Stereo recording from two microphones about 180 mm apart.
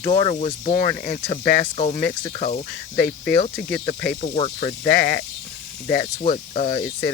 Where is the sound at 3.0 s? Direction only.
60° left (ahead or behind).